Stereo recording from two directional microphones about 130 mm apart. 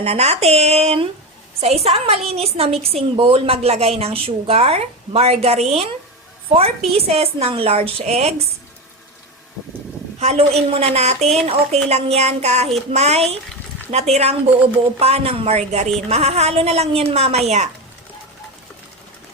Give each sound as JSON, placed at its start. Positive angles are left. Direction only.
{"t": 0.0, "sound": "a woman's voice", "side_deg": -55}
{"t": 10.2, "sound": "a woman's voice", "side_deg": -55}